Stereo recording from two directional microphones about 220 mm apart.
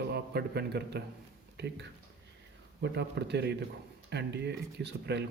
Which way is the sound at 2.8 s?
50° right (ahead or behind).